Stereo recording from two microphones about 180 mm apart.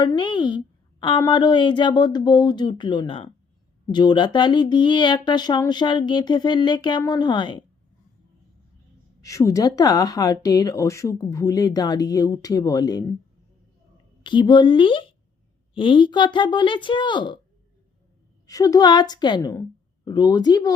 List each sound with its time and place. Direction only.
0.0 s speech: 25° left (ahead or behind)
9.2 s speech: 15° left (ahead or behind)
14.3 s speech: 25° left (ahead or behind)
18.4 s speech: 20° left (ahead or behind)